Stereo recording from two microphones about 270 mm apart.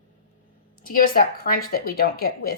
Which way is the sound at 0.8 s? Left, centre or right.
Left.